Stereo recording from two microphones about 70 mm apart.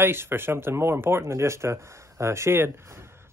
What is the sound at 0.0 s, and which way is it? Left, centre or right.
Speech, right.